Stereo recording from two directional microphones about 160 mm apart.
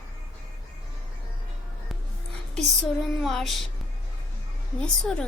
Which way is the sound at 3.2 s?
Centre (ahead or behind).